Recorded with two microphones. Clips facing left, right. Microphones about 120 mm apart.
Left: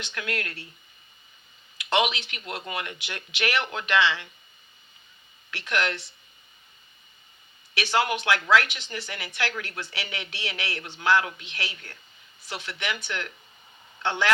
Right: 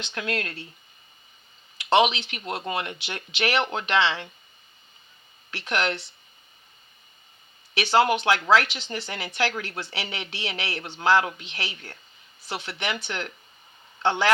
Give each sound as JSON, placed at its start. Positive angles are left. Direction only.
{"t": 0.0, "sound": "speech", "side_deg": -25}
{"t": 1.8, "sound": "speech", "side_deg": -25}
{"t": 5.5, "sound": "speech", "side_deg": -30}
{"t": 7.7, "sound": "speech", "side_deg": -30}